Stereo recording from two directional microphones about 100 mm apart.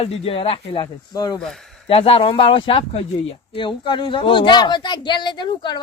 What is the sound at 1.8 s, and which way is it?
Speech, 70° left (ahead or behind).